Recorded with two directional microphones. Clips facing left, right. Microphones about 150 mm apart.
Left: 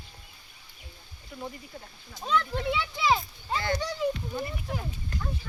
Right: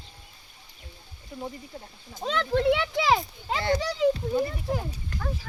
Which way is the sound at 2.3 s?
75° right (ahead or behind).